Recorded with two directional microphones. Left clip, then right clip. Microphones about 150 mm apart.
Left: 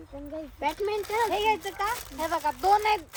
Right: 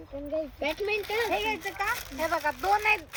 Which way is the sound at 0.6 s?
35° left (ahead or behind).